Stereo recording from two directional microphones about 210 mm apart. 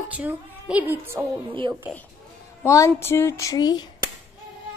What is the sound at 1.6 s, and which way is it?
Speech, 25° right (ahead or behind).